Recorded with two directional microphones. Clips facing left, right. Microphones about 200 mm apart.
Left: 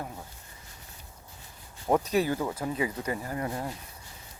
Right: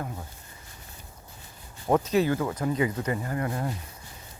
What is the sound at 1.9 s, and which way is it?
Speech, 15° left (ahead or behind).